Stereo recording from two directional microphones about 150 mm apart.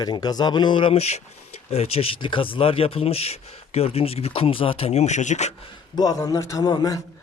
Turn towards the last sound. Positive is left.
turn(degrees=25)  # may be behind; listen again after turning